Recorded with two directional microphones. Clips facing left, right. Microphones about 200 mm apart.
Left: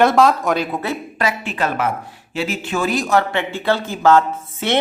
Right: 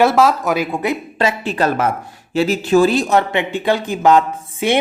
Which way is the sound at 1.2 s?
35° right (ahead or behind).